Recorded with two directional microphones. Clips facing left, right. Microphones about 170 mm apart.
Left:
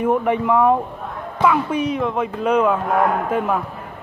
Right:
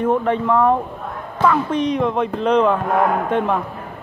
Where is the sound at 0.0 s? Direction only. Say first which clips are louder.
Even; 10° left (ahead or behind).